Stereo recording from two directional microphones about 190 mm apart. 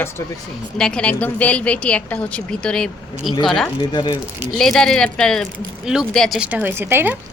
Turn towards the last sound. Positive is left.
turn(degrees=-10)  # may be behind; listen again after turning